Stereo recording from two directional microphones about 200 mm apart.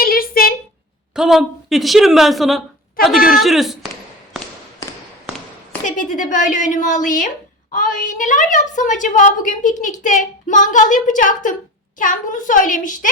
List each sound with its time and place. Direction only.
0.0 s a sound: 45° left (ahead or behind)
1.1 s a woman's voice: centre (ahead or behind)
5.8 s a woman's voice: 40° left (ahead or behind)